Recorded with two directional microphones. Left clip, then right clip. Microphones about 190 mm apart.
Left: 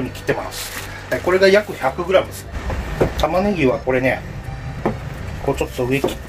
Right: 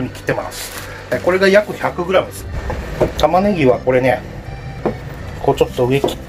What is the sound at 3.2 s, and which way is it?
Speech, 35° right (ahead or behind).